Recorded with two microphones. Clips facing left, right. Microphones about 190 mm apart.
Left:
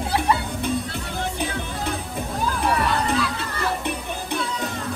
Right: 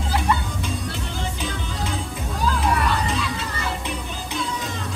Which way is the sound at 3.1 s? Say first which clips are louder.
Left 2 dB; 60° left (ahead or behind).